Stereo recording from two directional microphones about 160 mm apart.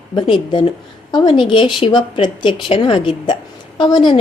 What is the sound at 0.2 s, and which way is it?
A woman's voice, 30° left (ahead or behind).